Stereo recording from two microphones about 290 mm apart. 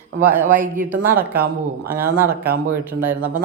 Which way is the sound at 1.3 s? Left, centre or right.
Right.